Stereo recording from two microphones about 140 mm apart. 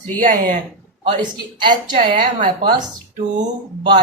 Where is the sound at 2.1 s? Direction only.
90° right.